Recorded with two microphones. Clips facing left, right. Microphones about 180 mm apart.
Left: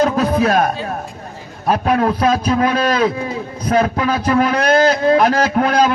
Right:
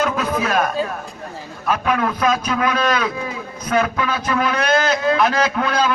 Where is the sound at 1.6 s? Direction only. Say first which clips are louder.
Left 4 dB; 35° left (ahead or behind).